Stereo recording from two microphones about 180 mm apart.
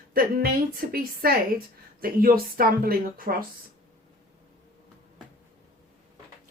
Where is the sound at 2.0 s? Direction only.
55° right (ahead or behind).